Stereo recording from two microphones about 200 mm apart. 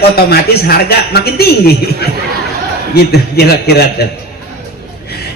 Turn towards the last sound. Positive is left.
turn(degrees=55)  # may be behind; listen again after turning